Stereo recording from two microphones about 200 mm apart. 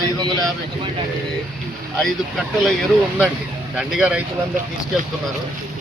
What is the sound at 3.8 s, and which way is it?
Speech, 5° right (ahead or behind).